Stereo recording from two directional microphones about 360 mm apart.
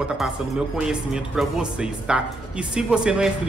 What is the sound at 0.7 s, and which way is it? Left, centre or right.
Speech, centre.